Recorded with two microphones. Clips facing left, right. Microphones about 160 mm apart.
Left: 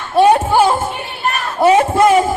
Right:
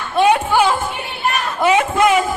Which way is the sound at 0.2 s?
40° left (ahead or behind).